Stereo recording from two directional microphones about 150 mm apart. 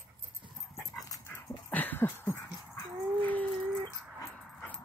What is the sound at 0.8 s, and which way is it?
Dog, 25° left (ahead or behind).